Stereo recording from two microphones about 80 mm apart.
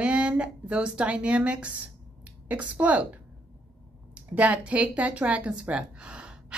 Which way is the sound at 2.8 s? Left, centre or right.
Centre.